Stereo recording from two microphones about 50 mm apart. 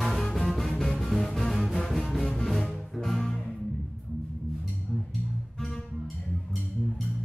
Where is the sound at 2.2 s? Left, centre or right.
Centre.